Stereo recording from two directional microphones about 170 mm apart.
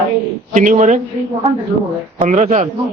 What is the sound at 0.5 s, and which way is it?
Speech, 45° right (ahead or behind).